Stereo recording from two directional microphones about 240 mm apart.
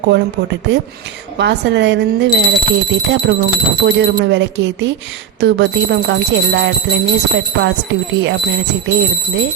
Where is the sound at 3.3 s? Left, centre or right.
Right.